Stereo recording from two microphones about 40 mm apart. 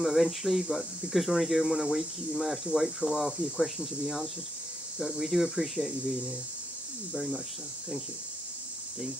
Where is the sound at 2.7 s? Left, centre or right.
Centre.